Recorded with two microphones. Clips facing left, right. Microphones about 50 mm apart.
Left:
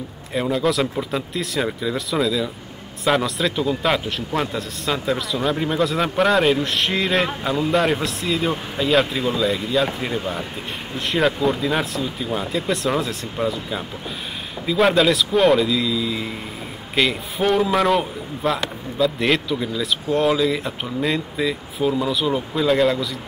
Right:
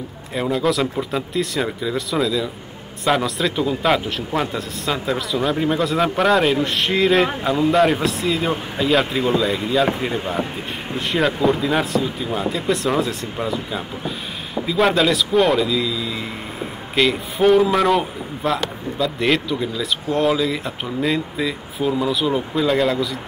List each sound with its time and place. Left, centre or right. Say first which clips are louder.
0.3 s a man's voice: right 1 dB; centre
10.0 s speech: right 2 dB; centre
11.0 s a man's voice: right 1 dB; centre